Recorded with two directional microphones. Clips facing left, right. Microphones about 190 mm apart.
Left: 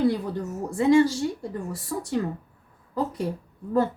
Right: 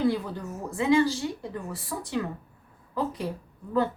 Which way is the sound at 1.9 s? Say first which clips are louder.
Left 3 dB; 45° left (ahead or behind).